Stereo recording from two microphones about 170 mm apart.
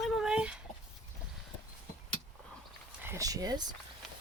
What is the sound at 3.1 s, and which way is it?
Speech, 20° right (ahead or behind).